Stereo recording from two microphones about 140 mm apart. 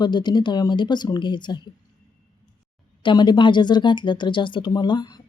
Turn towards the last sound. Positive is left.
turn(degrees=30)  # may be behind; listen again after turning